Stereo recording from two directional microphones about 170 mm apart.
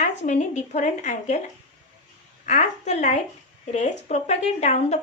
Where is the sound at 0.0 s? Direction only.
45° left (ahead or behind).